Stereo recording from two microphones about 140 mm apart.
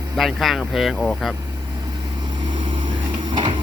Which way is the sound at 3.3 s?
35° right (ahead or behind).